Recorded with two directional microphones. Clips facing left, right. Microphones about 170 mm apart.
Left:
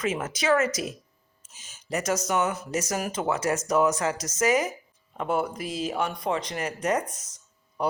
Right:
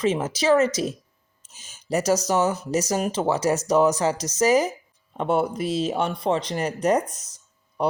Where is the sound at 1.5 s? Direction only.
35° right (ahead or behind).